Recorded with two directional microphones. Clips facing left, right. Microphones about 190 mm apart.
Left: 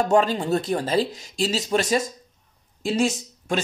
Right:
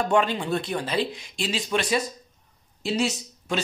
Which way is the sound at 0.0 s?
40° left (ahead or behind).